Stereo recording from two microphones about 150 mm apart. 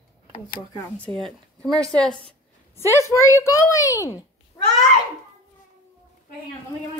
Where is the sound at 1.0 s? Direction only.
5° left (ahead or behind).